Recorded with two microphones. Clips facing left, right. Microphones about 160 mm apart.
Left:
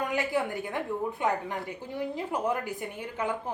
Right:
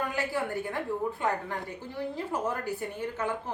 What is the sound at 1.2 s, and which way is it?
A woman's voice, 15° left (ahead or behind).